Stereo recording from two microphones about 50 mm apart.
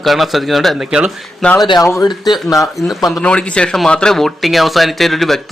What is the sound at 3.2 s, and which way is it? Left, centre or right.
Speech, left.